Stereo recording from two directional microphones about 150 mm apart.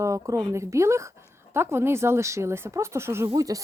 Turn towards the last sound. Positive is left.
turn(degrees=-25)  # may be behind; listen again after turning